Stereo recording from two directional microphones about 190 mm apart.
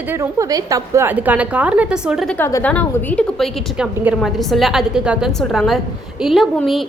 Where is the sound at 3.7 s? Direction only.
5° right (ahead or behind).